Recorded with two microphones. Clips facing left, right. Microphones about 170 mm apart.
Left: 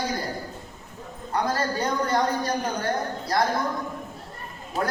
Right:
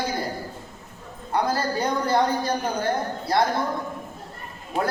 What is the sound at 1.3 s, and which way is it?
A man's voice, 30° right (ahead or behind).